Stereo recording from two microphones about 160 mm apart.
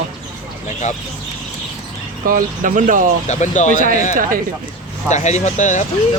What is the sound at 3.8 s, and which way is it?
Speech, 60° right (ahead or behind).